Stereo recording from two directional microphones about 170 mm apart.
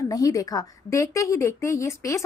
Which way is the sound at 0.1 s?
20° left (ahead or behind).